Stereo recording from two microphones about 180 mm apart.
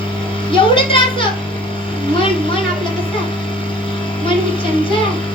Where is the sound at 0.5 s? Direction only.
30° left (ahead or behind).